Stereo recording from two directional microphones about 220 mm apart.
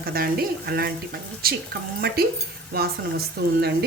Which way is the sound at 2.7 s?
45° right (ahead or behind).